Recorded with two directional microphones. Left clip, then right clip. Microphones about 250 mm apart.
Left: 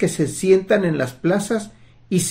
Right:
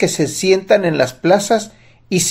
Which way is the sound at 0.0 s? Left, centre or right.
Centre.